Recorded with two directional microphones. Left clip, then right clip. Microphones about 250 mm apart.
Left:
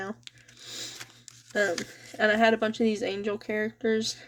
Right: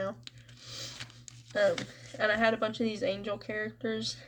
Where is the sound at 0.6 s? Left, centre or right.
Left.